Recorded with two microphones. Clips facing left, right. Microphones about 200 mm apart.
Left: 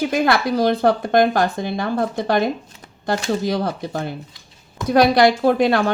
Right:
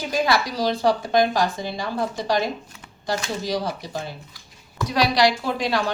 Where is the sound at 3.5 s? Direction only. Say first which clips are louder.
Left 4 dB; 55° left (ahead or behind).